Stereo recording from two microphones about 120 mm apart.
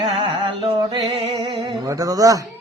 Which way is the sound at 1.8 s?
30° right (ahead or behind).